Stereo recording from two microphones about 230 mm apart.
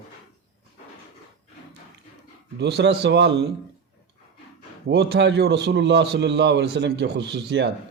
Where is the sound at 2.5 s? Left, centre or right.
Right.